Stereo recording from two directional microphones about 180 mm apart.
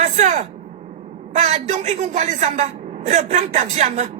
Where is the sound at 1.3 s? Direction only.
40° right (ahead or behind).